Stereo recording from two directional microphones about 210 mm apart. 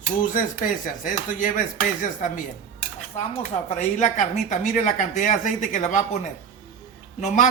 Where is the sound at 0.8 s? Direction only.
40° left (ahead or behind).